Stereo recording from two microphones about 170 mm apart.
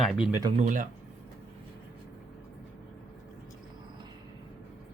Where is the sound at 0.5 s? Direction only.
50° right (ahead or behind).